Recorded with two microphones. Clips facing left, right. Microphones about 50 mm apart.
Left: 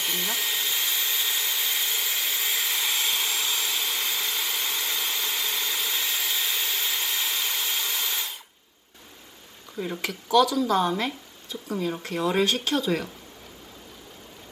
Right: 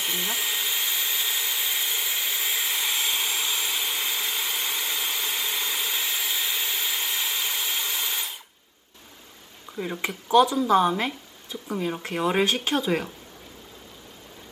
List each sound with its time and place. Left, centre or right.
0.0 s vacuum cleaner: centre
9.7 s speech: centre
10.0 s speech: right
12.0 s speech: right